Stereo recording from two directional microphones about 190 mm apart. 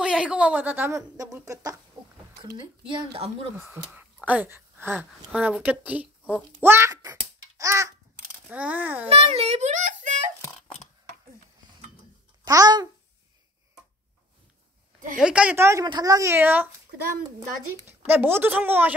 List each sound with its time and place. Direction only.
0.0 s a woman's voice: 5° right (ahead or behind); by 3.3 s 25° right (ahead or behind)
3.6 s a child's voice: 5° right (ahead or behind)
9.1 s a sound: 35° right (ahead or behind)
12.4 s a child's voice: 20° right (ahead or behind)
15.1 s a woman's voice: 5° right (ahead or behind)